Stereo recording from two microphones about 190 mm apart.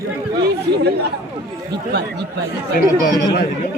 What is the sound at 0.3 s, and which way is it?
Chatter, 60° right (ahead or behind).